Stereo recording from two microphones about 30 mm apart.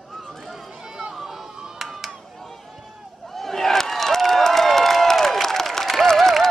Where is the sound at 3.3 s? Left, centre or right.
Centre.